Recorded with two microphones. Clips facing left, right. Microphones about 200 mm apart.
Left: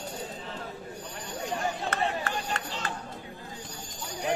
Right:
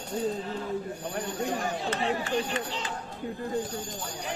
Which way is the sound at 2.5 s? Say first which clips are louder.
Right 2 dB; 60° left (ahead or behind).